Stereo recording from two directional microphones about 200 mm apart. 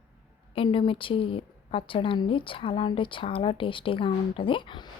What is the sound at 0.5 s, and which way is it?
A woman's voice, 25° left (ahead or behind).